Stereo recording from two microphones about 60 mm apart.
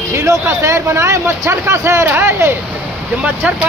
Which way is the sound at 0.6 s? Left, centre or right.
Right.